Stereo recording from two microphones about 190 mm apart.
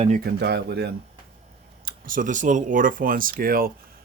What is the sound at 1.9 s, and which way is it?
Speech, 45° right (ahead or behind).